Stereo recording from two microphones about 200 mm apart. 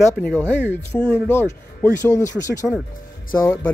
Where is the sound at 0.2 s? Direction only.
5° left (ahead or behind).